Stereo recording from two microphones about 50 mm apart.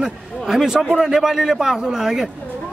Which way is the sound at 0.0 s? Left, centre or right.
Centre.